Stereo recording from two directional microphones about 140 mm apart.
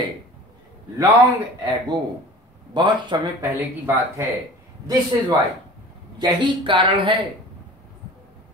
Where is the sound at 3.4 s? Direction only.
15° right (ahead or behind).